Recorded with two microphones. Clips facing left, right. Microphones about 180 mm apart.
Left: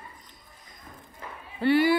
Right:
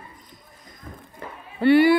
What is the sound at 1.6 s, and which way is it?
Speech, 65° right (ahead or behind).